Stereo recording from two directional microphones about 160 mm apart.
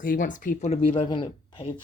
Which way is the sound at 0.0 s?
60° left (ahead or behind).